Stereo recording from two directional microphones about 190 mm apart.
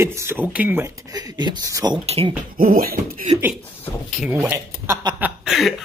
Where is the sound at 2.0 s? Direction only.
30° right (ahead or behind).